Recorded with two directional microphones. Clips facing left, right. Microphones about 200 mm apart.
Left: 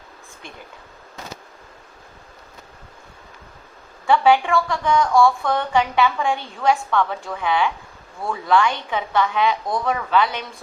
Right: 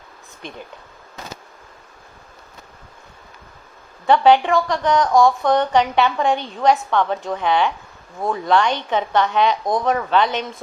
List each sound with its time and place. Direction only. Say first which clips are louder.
4.0 s a woman's voice: right 2 dB; 20° right (ahead or behind)